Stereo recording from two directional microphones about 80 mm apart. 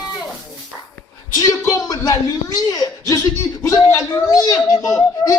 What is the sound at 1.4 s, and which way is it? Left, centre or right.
A man's voice, left.